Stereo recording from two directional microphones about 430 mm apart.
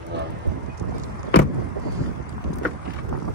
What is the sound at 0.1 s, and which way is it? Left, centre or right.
Vehicle, right.